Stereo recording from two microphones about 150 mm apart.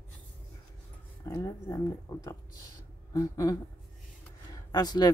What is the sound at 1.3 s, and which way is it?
Speech, 20° left (ahead or behind).